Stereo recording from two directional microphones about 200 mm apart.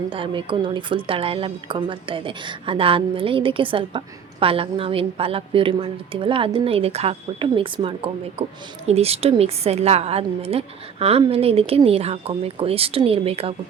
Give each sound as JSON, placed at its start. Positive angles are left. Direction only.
{"t": 0.1, "sound": "a woman's voice", "side_deg": -25}